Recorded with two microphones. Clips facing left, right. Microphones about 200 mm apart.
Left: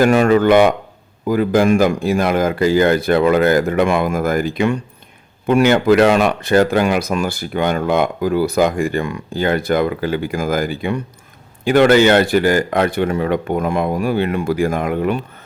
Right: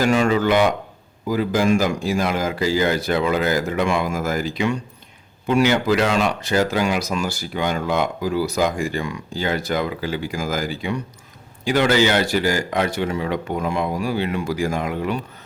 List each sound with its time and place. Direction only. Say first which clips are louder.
0.0 s speech: left 6 dB; 55° left (ahead or behind)